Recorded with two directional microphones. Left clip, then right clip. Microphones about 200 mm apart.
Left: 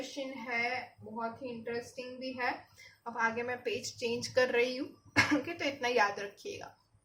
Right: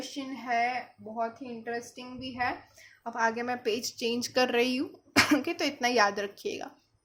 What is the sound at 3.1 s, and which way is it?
A woman's voice, 45° right (ahead or behind).